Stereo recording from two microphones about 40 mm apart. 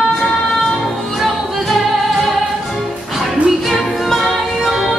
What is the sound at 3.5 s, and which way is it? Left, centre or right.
Music, centre.